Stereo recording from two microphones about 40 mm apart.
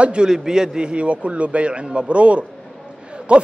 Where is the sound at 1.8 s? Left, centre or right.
Centre.